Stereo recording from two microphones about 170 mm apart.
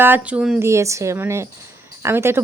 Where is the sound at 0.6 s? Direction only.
15° right (ahead or behind).